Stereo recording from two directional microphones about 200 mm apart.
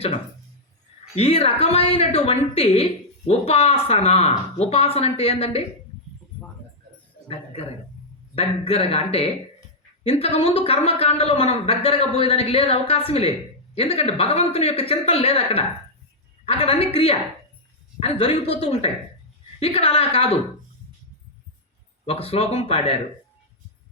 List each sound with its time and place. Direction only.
1.1 s a woman's voice: 30° left (ahead or behind)
8.4 s a woman's voice: 30° left (ahead or behind)
22.0 s a woman's voice: 30° left (ahead or behind)